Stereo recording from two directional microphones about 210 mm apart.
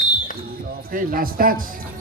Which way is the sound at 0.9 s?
40° right (ahead or behind).